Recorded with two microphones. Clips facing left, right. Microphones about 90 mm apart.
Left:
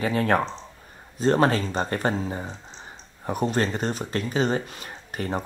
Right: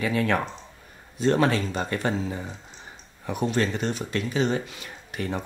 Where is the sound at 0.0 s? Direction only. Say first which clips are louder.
Left 2 dB; 35° left (ahead or behind).